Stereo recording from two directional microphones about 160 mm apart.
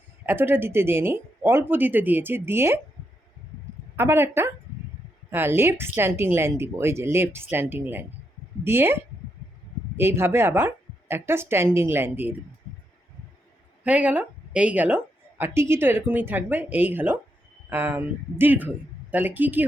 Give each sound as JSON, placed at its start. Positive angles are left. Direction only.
{"t": 0.3, "sound": "speech", "side_deg": -15}
{"t": 3.9, "sound": "speech", "side_deg": -15}
{"t": 10.0, "sound": "speech", "side_deg": -15}
{"t": 13.8, "sound": "speech", "side_deg": -10}